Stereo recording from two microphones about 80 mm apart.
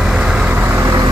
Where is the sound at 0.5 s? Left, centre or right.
Right.